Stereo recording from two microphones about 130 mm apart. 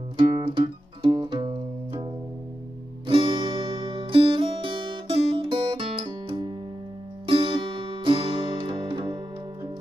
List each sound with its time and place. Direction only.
0.2 s music: 40° right (ahead or behind)
3.1 s music: 40° right (ahead or behind)